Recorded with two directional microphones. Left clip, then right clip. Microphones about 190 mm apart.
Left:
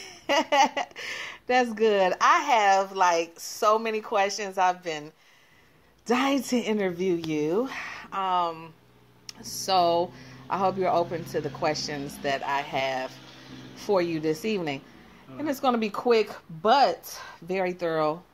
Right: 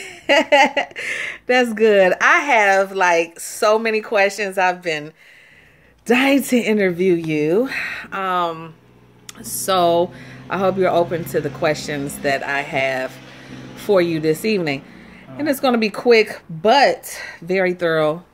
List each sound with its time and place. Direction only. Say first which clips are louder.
0.0 s speech: right 9 dB; 15° right (ahead or behind)